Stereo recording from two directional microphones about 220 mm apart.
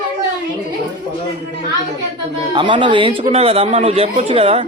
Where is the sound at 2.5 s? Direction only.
20° right (ahead or behind).